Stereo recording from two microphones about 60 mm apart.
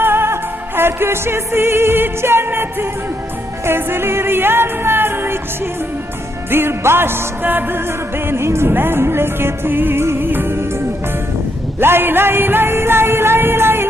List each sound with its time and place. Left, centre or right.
0.0 s music: right
6.5 s music: right
8.3 s music: right
11.8 s music: right